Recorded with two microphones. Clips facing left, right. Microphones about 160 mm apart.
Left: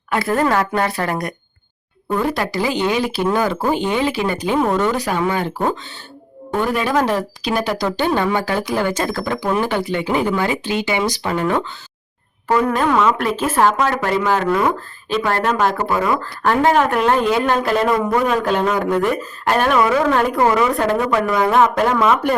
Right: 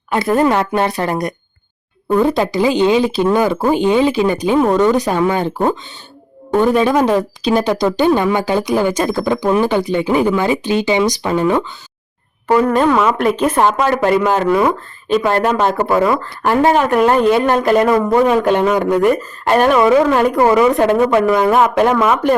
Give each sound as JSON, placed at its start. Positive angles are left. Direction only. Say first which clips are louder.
{"t": 0.1, "sound": "speech", "louder": "right 4 dB", "side_deg": -20}
{"t": 12.6, "sound": "speech", "louder": "right 3 dB", "side_deg": 0}
{"t": 18.1, "sound": "speech", "louder": "right 5 dB", "side_deg": -20}